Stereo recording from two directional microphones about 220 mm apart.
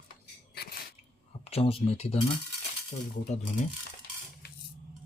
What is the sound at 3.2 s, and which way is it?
Speech, 30° left (ahead or behind).